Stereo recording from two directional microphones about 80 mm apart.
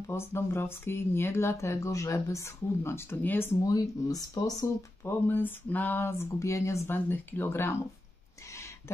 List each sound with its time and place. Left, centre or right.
0.0 s speech: left
3.6 s speech: left
5.2 s speech: left
6.9 s speech: left